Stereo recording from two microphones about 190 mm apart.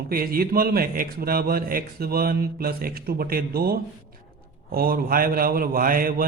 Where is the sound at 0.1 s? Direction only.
50° right (ahead or behind).